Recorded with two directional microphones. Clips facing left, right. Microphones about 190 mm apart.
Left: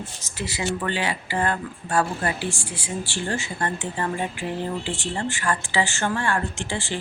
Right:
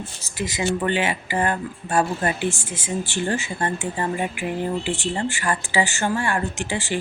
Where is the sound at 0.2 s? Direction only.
15° right (ahead or behind).